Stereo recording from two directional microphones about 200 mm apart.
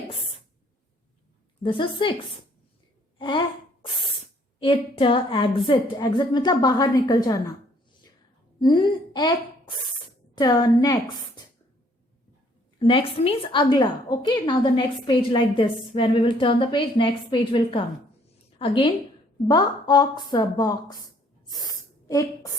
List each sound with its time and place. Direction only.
1.6 s a woman's voice: 25° left (ahead or behind)
3.2 s a sound: 25° left (ahead or behind)
4.6 s a woman's voice: 25° left (ahead or behind)
8.6 s a woman's voice: 25° left (ahead or behind)
12.8 s a woman's voice: 25° left (ahead or behind)
21.5 s a sound: 15° left (ahead or behind)